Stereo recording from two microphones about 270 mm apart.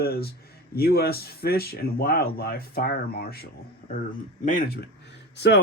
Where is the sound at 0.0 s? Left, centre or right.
Left.